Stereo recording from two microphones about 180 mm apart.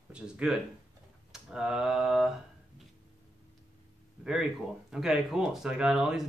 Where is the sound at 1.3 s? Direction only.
5° right (ahead or behind).